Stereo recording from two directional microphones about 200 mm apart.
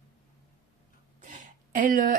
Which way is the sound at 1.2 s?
40° right (ahead or behind).